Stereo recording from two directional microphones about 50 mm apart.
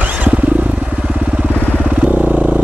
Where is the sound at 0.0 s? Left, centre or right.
Right.